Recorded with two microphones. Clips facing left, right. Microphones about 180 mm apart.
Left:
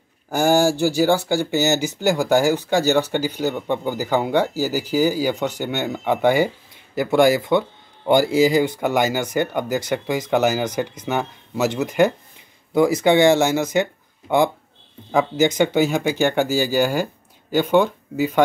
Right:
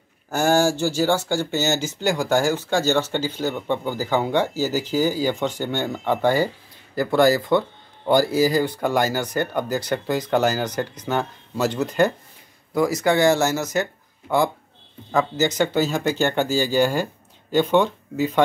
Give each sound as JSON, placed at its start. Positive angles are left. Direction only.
{"t": 0.3, "sound": "speech", "side_deg": 15}
{"t": 8.1, "sound": "speech", "side_deg": 25}